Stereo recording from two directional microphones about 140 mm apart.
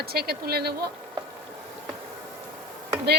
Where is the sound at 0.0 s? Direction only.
90° right.